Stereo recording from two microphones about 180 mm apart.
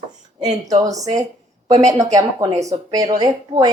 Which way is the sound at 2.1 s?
20° right (ahead or behind).